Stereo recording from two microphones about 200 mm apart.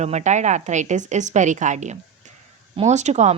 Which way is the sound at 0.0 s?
35° right (ahead or behind).